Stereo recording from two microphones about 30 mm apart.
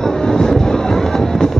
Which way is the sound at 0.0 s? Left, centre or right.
Left.